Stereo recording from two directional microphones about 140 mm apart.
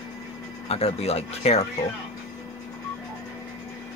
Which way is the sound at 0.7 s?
45° left (ahead or behind).